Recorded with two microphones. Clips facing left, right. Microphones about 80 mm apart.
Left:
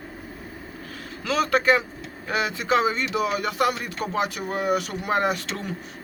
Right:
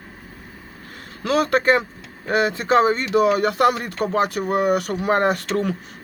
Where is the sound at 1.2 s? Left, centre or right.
Right.